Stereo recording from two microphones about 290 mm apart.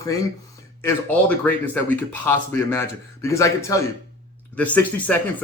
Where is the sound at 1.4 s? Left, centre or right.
Centre.